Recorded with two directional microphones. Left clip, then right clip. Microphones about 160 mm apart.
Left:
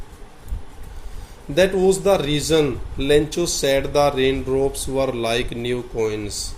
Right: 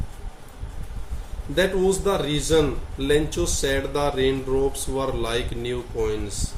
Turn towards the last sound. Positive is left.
turn(degrees=30)  # may be behind; listen again after turning